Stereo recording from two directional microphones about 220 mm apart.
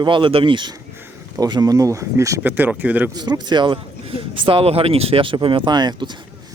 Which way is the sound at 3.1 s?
20° right (ahead or behind).